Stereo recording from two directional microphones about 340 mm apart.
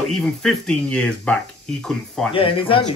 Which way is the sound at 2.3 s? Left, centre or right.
Centre.